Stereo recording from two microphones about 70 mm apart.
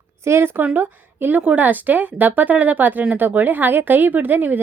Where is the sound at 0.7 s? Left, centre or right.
Right.